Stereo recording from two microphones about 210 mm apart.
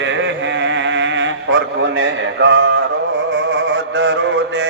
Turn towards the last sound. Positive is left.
turn(degrees=-60)  # may be behind; listen again after turning